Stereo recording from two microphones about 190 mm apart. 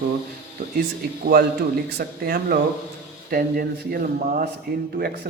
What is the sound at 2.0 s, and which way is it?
A man's voice, 50° right (ahead or behind).